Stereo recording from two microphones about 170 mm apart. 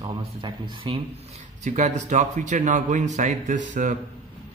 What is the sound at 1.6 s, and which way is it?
Speech, 45° right (ahead or behind).